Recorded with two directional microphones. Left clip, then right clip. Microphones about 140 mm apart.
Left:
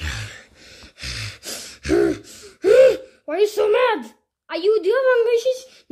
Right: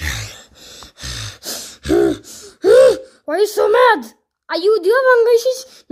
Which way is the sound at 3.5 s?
35° right (ahead or behind).